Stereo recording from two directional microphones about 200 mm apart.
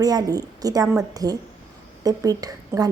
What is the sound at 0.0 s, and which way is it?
A woman's voice, 20° right (ahead or behind).